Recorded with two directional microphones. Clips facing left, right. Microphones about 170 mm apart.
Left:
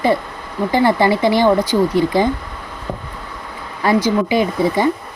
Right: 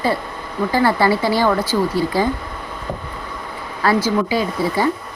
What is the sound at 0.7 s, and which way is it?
Speech, 20° left (ahead or behind).